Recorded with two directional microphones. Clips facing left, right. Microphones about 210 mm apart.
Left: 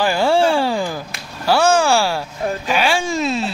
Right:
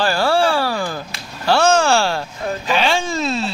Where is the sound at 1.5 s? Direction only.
10° left (ahead or behind).